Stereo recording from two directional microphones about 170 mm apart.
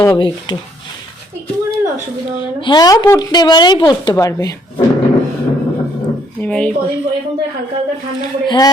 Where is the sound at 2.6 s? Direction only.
25° left (ahead or behind).